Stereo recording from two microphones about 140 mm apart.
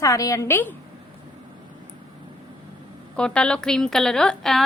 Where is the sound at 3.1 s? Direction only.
5° left (ahead or behind).